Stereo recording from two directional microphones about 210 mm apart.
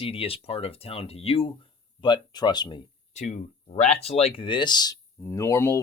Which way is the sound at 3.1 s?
35° left (ahead or behind).